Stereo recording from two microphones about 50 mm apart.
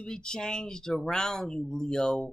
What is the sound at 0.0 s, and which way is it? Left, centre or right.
Speech, centre.